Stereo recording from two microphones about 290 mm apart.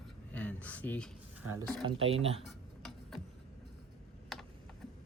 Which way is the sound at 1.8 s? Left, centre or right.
Centre.